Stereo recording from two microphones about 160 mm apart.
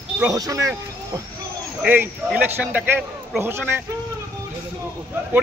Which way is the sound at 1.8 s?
10° right (ahead or behind).